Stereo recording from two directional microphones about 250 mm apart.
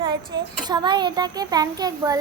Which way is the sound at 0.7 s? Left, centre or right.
Centre.